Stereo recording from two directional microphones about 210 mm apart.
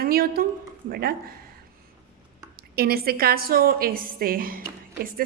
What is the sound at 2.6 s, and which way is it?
A woman's voice, 45° right (ahead or behind).